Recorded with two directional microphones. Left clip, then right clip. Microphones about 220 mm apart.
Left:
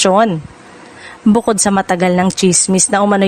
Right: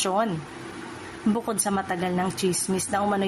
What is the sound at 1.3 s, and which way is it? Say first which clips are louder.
A woman's voice: left 14 dB; 45° left (ahead or behind).